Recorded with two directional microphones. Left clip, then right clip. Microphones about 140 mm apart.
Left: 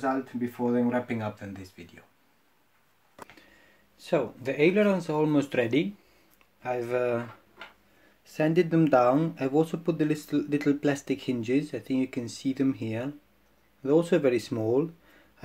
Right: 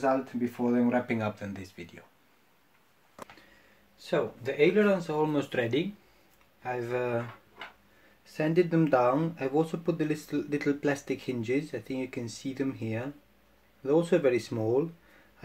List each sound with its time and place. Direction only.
0.0 s speech: 15° right (ahead or behind)
4.0 s speech: 55° left (ahead or behind)
8.3 s speech: 35° left (ahead or behind)